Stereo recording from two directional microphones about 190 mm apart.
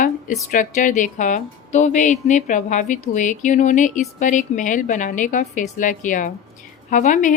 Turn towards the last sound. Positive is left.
turn(degrees=40)  # may be behind; listen again after turning